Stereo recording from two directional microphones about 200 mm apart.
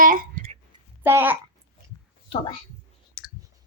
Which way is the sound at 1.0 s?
10° right (ahead or behind).